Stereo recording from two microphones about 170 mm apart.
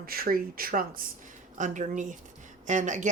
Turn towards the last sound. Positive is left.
turn(degrees=-45)  # may be behind; listen again after turning